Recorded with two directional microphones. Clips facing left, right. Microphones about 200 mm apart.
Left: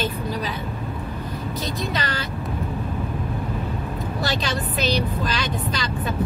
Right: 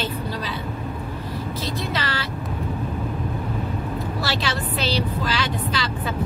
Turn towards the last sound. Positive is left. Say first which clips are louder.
# right 1 dB
turn(degrees=15)  # may be behind; listen again after turning